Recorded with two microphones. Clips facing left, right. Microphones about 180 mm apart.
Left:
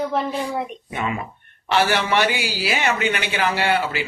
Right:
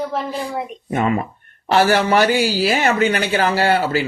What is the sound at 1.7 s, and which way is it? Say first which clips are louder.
Speech: right 5 dB; 40° right (ahead or behind).